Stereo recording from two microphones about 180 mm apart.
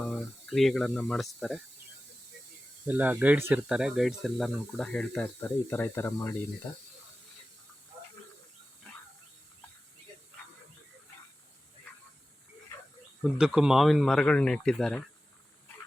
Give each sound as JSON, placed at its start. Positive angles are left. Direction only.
{"t": 0.0, "sound": "speech", "side_deg": 0}
{"t": 2.8, "sound": "speech", "side_deg": -10}
{"t": 13.4, "sound": "speech", "side_deg": -5}